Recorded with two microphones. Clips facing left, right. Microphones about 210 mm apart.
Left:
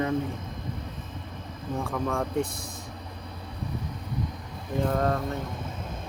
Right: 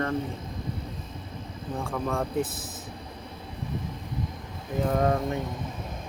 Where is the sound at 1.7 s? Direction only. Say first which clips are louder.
Left 1 dB; centre (ahead or behind).